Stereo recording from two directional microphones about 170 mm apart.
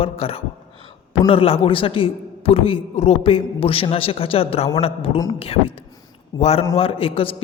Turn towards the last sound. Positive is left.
turn(degrees=35)  # may be behind; listen again after turning